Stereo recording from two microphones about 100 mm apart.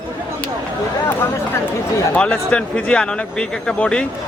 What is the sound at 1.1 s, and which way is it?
A man's voice, 20° left (ahead or behind).